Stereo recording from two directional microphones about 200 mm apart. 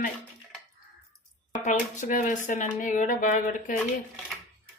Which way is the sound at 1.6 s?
40° left (ahead or behind).